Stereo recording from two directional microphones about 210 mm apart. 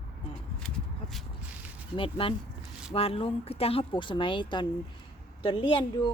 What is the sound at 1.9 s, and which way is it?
Speech, 25° left (ahead or behind).